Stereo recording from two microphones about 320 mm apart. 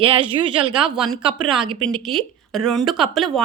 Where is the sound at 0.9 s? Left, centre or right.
Centre.